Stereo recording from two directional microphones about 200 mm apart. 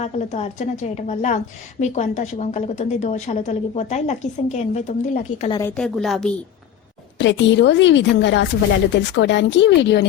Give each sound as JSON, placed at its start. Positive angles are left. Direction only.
{"t": 0.0, "sound": "a woman's voice", "side_deg": 35}
{"t": 5.4, "sound": "speech", "side_deg": 25}
{"t": 5.6, "sound": "a woman's voice", "side_deg": 5}
{"t": 7.2, "sound": "speech", "side_deg": 65}